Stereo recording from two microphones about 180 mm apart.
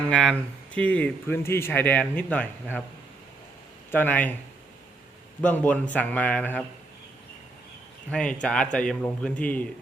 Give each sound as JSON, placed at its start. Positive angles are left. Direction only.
{"t": 0.1, "sound": "speech", "side_deg": 5}
{"t": 3.9, "sound": "speech", "side_deg": 10}
{"t": 5.4, "sound": "speech", "side_deg": 5}
{"t": 8.1, "sound": "a man's voice", "side_deg": 5}